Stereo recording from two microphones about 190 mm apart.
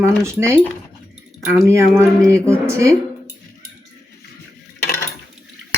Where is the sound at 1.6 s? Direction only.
15° right (ahead or behind).